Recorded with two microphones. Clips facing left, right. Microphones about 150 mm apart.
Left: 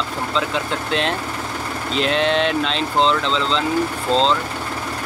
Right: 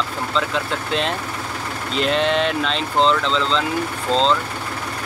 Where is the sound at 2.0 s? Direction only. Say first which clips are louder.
Even; centre (ahead or behind).